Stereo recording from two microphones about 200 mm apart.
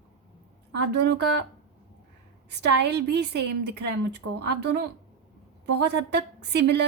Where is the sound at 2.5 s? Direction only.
55° right (ahead or behind).